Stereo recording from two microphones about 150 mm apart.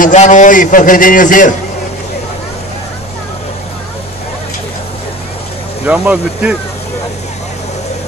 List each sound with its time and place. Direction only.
0.0 s a man's voice: 55° left (ahead or behind)
5.9 s speech: 10° right (ahead or behind)